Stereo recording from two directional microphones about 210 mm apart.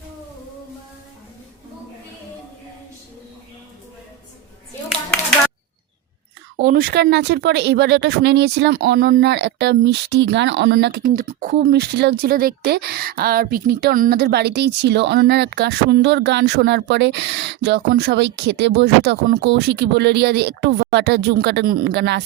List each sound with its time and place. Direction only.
6.6 s speech: 45° right (ahead or behind)